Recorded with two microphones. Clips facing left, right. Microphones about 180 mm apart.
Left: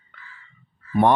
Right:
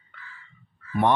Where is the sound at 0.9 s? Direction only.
40° left (ahead or behind).